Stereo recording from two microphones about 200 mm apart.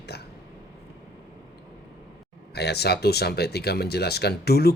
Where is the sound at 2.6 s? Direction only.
55° left (ahead or behind).